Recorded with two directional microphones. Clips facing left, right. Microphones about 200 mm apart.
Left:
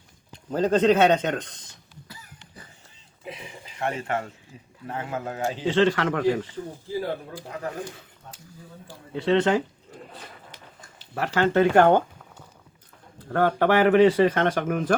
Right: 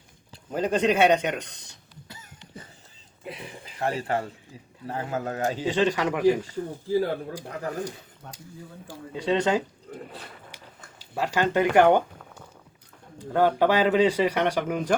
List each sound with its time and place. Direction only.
0.5 s speech: 10° right (ahead or behind)
3.8 s speech: 35° right (ahead or behind)
5.6 s speech: 15° right (ahead or behind)
8.9 s speech: 15° right (ahead or behind)
11.0 s speech: 15° right (ahead or behind)
13.1 s speech: 15° right (ahead or behind)